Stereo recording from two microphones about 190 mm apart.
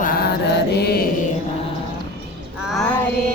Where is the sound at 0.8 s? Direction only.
60° left (ahead or behind).